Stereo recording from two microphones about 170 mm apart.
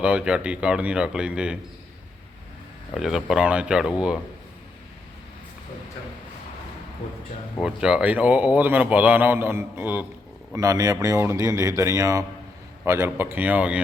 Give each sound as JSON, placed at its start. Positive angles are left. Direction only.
{"t": 0.0, "sound": "a man's voice", "side_deg": -5}
{"t": 2.9, "sound": "a man's voice", "side_deg": 0}
{"t": 7.6, "sound": "a man's voice", "side_deg": -5}
{"t": 10.5, "sound": "a man's voice", "side_deg": -20}